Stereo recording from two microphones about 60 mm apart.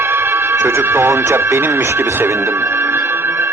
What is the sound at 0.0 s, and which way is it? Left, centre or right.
Speech, right.